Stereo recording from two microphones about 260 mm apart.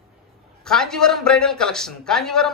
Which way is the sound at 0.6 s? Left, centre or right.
Centre.